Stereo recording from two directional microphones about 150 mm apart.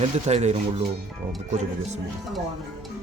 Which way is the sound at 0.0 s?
45° right (ahead or behind).